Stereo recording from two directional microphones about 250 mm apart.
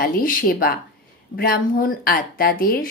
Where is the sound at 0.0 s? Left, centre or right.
Left.